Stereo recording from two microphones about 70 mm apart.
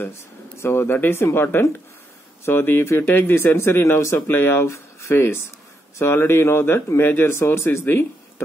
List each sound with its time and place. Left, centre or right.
0.6 s speech: left